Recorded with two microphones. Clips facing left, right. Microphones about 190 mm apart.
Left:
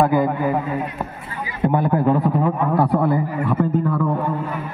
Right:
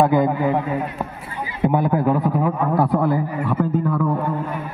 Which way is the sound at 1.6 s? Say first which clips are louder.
Even; 5° right (ahead or behind).